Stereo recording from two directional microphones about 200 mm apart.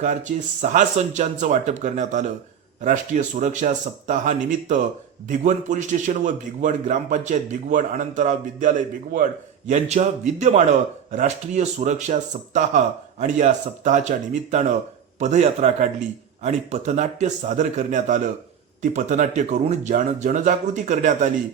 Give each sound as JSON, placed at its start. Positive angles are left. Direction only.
{"t": 0.0, "sound": "a man's voice", "side_deg": -40}